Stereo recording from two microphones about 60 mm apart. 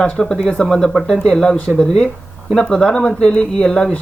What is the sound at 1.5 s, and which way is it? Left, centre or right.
Speech, left.